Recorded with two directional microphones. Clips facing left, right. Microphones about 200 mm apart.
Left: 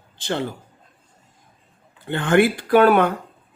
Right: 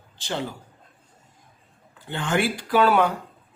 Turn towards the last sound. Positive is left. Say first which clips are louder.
# left 5 dB
turn(degrees=55)  # may be behind; listen again after turning